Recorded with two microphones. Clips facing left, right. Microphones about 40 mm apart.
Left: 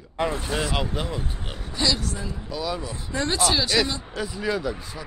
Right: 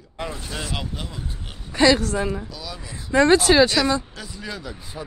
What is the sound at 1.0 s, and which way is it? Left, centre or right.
Speech, left.